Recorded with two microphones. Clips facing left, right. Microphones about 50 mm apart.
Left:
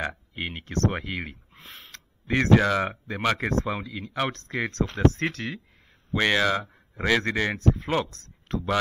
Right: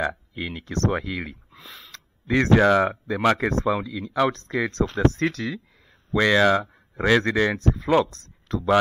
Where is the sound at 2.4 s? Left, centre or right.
Right.